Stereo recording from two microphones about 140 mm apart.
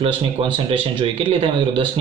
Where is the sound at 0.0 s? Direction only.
40° right (ahead or behind).